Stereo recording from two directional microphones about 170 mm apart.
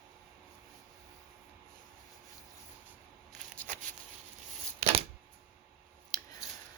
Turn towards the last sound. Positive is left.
turn(degrees=20)  # may be behind; listen again after turning